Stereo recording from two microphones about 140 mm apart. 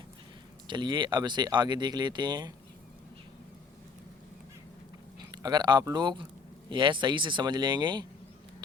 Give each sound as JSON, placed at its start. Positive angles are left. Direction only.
{"t": 0.7, "sound": "speech", "side_deg": -35}
{"t": 5.3, "sound": "speech", "side_deg": -30}